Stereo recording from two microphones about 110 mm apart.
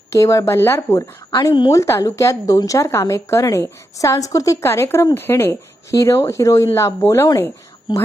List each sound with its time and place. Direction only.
0.1 s a woman's voice: 30° left (ahead or behind)
7.9 s a woman's voice: 40° left (ahead or behind)